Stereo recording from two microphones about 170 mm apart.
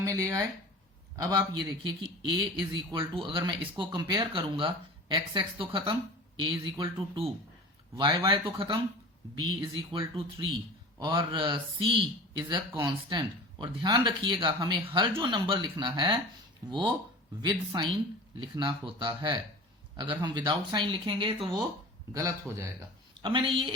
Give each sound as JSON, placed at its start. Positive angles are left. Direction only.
{"t": 0.0, "sound": "speech", "side_deg": -20}
{"t": 11.0, "sound": "speech", "side_deg": -30}
{"t": 22.1, "sound": "speech", "side_deg": -20}
{"t": 23.2, "sound": "speech", "side_deg": -30}